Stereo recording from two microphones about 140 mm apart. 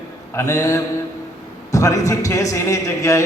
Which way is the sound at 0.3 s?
25° left (ahead or behind).